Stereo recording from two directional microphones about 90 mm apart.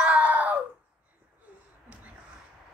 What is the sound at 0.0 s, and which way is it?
Screaming, 15° right (ahead or behind).